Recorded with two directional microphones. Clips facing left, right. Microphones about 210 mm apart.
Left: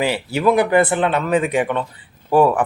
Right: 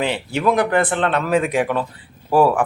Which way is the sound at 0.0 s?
5° left (ahead or behind).